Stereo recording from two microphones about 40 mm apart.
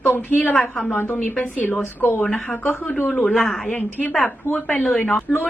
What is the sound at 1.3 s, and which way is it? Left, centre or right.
Speech, left.